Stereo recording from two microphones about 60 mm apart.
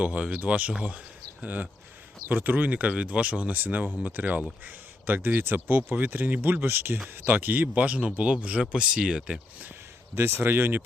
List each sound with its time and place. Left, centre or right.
0.0 s speech: right
10.2 s speech: right